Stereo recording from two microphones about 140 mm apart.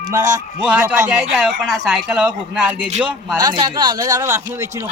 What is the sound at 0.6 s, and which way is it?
Speech, 5° right (ahead or behind).